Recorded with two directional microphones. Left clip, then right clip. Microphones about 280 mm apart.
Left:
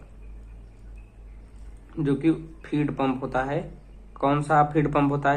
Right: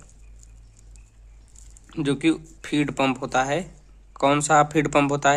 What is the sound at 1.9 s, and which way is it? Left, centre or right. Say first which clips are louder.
A man's voice: right 1 dB; right.